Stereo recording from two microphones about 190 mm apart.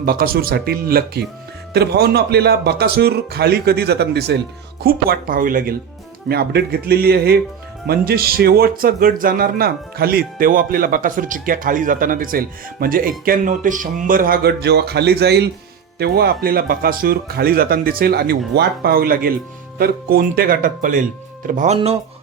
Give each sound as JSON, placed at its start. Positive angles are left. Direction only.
{"t": 0.0, "sound": "speech", "side_deg": -50}